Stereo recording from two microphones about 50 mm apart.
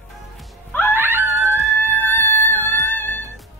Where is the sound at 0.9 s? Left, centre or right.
Right.